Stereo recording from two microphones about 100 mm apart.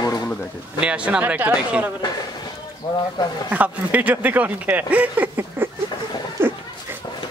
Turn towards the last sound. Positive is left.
turn(degrees=-25)  # may be behind; listen again after turning